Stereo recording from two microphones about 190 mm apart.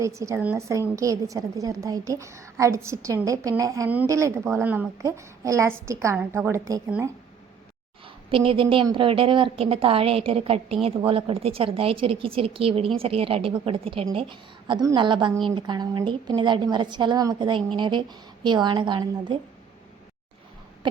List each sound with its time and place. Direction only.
0.0 s a woman's voice: 15° right (ahead or behind)
8.0 s a woman's voice: 25° right (ahead or behind)